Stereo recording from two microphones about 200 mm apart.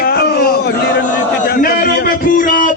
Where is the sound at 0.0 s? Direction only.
50° left (ahead or behind).